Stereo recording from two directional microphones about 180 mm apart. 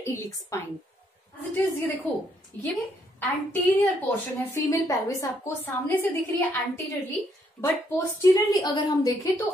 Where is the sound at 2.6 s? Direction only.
10° left (ahead or behind).